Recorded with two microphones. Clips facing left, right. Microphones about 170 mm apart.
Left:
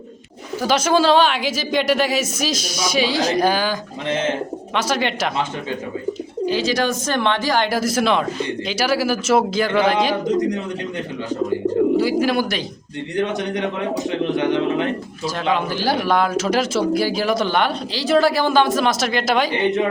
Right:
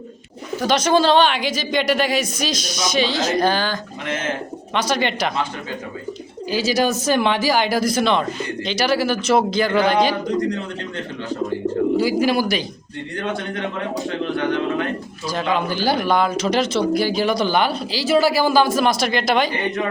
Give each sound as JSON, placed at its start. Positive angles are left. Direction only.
{"t": 0.6, "sound": "a man's voice", "side_deg": 5}
{"t": 4.0, "sound": "speech", "side_deg": 30}
{"t": 4.7, "sound": "a man's voice", "side_deg": 5}
{"t": 6.4, "sound": "a man's voice", "side_deg": -5}
{"t": 10.2, "sound": "speech", "side_deg": 20}
{"t": 11.9, "sound": "a man's voice", "side_deg": 0}
{"t": 13.1, "sound": "speech", "side_deg": 20}
{"t": 15.4, "sound": "a man's voice", "side_deg": 0}
{"t": 19.5, "sound": "speech", "side_deg": 25}